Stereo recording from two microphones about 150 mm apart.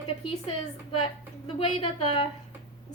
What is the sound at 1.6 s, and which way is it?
Speech, 40° left (ahead or behind).